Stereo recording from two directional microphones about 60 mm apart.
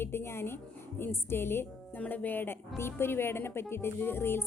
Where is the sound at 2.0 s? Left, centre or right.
Left.